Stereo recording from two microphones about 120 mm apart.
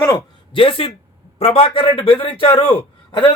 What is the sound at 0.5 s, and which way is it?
A man's voice, 50° left (ahead or behind).